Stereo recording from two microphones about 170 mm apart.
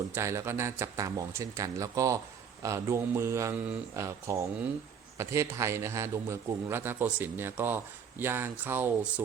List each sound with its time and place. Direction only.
0.1 s a man's voice: 15° right (ahead or behind)